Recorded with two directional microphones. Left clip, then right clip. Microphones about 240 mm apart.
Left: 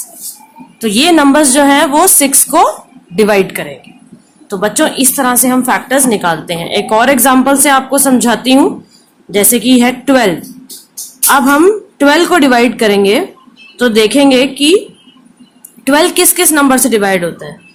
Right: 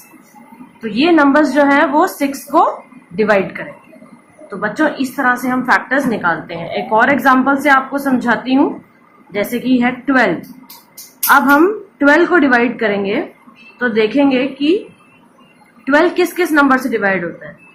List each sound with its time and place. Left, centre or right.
0.8 s a woman's voice: left
11.3 s a woman's voice: left
15.8 s a woman's voice: left